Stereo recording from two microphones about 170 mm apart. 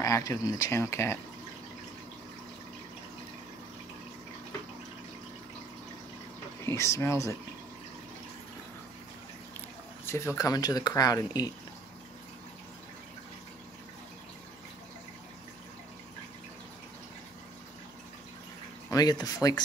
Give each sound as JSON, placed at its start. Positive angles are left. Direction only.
{"t": 0.0, "sound": "speech", "side_deg": 20}
{"t": 6.6, "sound": "speech", "side_deg": 15}
{"t": 10.0, "sound": "speech", "side_deg": 15}
{"t": 18.9, "sound": "speech", "side_deg": 20}